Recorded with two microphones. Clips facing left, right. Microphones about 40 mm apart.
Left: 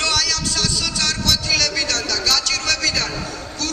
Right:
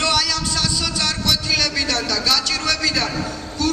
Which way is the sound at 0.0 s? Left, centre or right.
Centre.